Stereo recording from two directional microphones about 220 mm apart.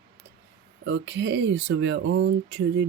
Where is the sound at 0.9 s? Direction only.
55° right (ahead or behind).